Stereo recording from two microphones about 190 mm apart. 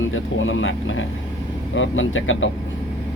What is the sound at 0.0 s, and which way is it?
Speech, 90° left.